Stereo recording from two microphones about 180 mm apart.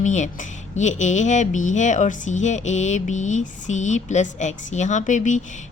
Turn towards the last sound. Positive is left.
turn(degrees=45)  # may be behind; listen again after turning